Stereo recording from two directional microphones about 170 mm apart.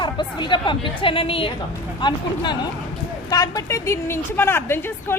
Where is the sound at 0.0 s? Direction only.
25° left (ahead or behind).